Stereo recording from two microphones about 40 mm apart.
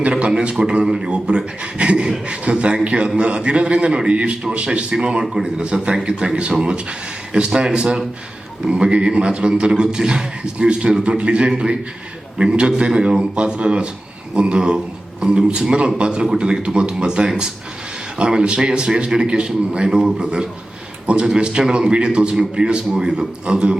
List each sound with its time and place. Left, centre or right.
0.1 s a man's voice: right
5.6 s a man's voice: right
15.2 s a man's voice: right